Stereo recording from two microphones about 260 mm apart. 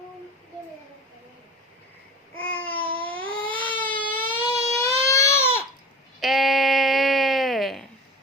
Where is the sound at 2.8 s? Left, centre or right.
Centre.